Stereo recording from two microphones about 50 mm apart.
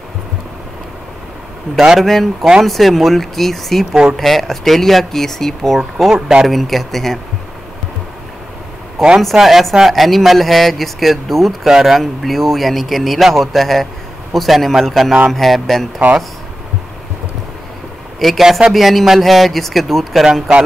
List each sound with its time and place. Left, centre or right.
1.8 s speech: centre
2.0 s speech: centre
3.9 s speech: centre
4.2 s speech: centre
9.2 s speech: centre
18.2 s speech: centre